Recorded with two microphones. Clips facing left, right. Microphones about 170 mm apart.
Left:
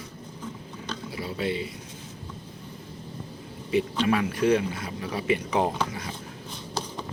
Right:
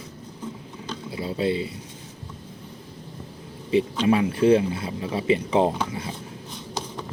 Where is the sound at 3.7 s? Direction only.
25° right (ahead or behind).